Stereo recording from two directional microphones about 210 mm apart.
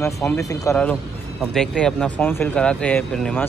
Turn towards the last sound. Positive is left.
turn(degrees=5)  # may be behind; listen again after turning